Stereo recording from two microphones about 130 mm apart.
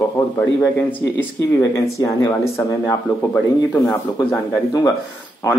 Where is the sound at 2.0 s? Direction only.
25° left (ahead or behind).